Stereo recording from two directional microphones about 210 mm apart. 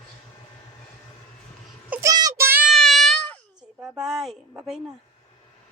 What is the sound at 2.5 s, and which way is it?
Child singing, 5° right (ahead or behind).